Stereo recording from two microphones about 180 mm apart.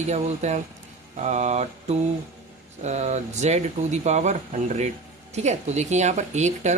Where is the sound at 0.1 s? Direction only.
40° right (ahead or behind).